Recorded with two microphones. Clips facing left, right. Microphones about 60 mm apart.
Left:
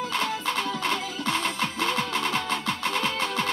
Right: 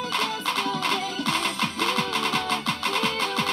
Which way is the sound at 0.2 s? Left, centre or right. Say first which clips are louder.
Right 1 dB; left.